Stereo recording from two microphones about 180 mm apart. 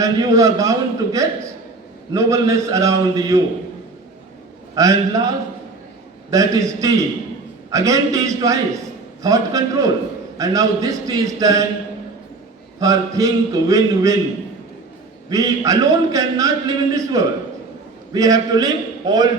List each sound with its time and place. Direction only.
0.0 s a man's voice: 20° right (ahead or behind)
4.7 s a man's voice: 20° right (ahead or behind)
6.3 s a man's voice: 20° right (ahead or behind)
12.8 s a man's voice: 20° right (ahead or behind)
15.3 s a man's voice: 20° right (ahead or behind)